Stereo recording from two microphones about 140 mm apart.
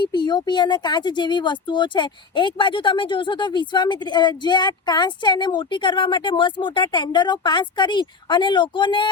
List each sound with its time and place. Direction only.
0.0 s speech: 30° left (ahead or behind)